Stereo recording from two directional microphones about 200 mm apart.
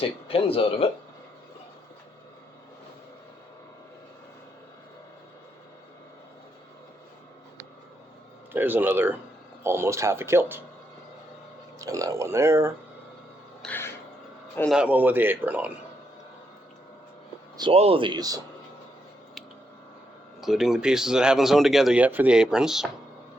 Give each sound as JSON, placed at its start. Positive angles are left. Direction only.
{"t": 0.0, "sound": "speech", "side_deg": 30}
{"t": 8.5, "sound": "speech", "side_deg": -10}
{"t": 11.8, "sound": "speech", "side_deg": -15}
{"t": 13.6, "sound": "music", "side_deg": 10}
{"t": 14.5, "sound": "a man's voice", "side_deg": 5}
{"t": 14.8, "sound": "speech", "side_deg": -10}
{"t": 17.6, "sound": "speech", "side_deg": -30}
{"t": 20.4, "sound": "speech", "side_deg": 0}